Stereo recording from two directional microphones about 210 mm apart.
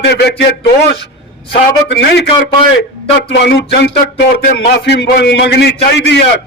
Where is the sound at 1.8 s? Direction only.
55° left (ahead or behind).